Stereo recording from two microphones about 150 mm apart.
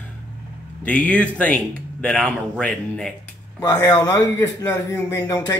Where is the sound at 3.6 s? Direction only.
25° left (ahead or behind).